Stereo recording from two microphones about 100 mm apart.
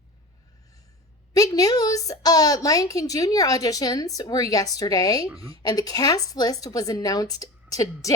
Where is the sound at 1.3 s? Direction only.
35° left (ahead or behind).